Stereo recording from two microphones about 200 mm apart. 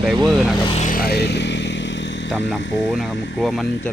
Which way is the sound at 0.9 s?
50° left (ahead or behind).